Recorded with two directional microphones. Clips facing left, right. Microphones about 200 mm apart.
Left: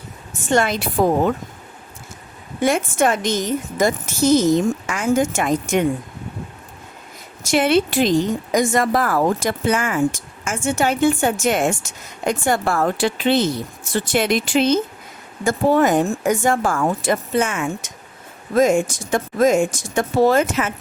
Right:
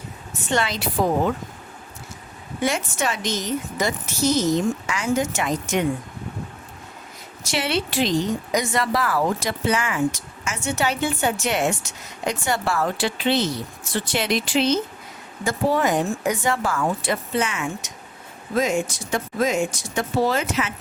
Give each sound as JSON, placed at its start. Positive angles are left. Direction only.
{"t": 0.4, "sound": "speech", "side_deg": 50}
{"t": 2.6, "sound": "speech", "side_deg": 50}
{"t": 7.4, "sound": "speech", "side_deg": 50}